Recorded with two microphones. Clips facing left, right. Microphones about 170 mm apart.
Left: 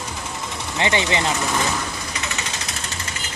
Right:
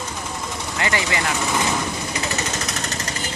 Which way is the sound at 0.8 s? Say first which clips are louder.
Left 3 dB; 20° left (ahead or behind).